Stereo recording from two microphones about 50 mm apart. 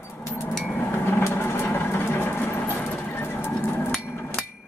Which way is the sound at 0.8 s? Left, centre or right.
Left.